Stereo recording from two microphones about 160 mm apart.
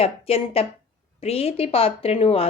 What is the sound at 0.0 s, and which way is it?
A woman's voice, 40° left (ahead or behind).